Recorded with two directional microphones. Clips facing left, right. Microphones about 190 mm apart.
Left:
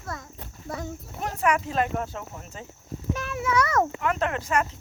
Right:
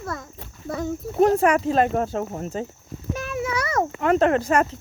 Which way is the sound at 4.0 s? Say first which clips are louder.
Right 8 dB; 35° right (ahead or behind).